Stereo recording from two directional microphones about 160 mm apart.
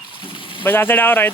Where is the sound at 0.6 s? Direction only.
10° left (ahead or behind).